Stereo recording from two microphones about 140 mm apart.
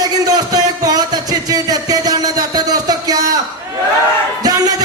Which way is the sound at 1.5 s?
25° right (ahead or behind).